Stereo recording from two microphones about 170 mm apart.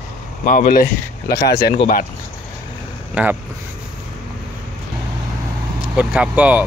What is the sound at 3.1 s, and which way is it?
Speech, 10° right (ahead or behind).